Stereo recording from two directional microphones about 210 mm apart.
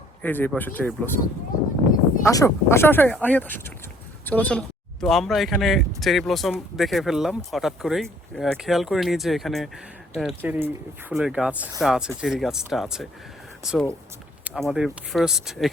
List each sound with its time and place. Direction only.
0.2 s speech: 10° left (ahead or behind)
2.2 s speech: 15° left (ahead or behind)